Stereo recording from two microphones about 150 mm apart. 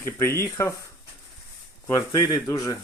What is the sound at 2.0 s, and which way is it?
Speech, 20° left (ahead or behind).